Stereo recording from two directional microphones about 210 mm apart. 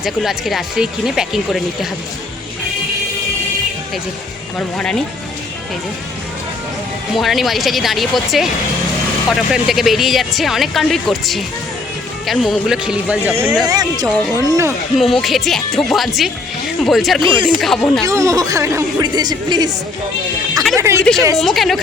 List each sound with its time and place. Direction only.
0.0 s speech: centre (ahead or behind)
4.5 s speech: 5° left (ahead or behind)
7.2 s speech: centre (ahead or behind)
13.7 s speech: 20° right (ahead or behind)
14.9 s speech: centre (ahead or behind)
17.2 s speech: 25° right (ahead or behind)
17.6 s speech: 5° left (ahead or behind)
18.0 s speech: 15° right (ahead or behind)
20.7 s speech: 15° right (ahead or behind)
21.3 s speech: centre (ahead or behind)